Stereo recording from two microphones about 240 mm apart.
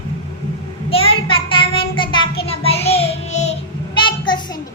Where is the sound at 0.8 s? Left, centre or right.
Left.